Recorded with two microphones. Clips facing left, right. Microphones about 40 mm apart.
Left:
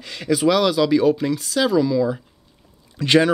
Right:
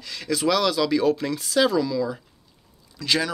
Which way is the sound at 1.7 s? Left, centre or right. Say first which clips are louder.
Left 5 dB; centre.